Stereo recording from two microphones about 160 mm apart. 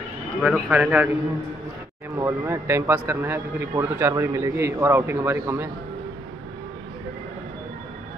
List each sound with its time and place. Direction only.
0.4 s a man's voice: 10° right (ahead or behind)
2.1 s a man's voice: 15° right (ahead or behind)